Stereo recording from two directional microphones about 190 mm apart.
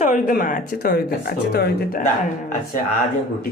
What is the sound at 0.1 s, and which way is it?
Speech, 45° left (ahead or behind).